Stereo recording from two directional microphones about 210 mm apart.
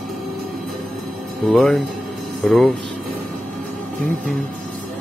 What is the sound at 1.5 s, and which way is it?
Speech, 5° left (ahead or behind).